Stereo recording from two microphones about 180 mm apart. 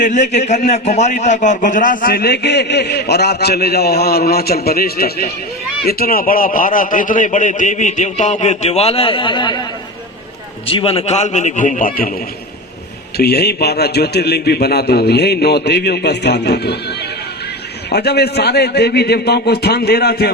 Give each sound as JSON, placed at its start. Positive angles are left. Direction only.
{"t": 0.0, "sound": "a man's voice", "side_deg": 40}
{"t": 10.7, "sound": "a man's voice", "side_deg": 30}
{"t": 13.1, "sound": "a man's voice", "side_deg": 60}
{"t": 17.8, "sound": "a man's voice", "side_deg": 65}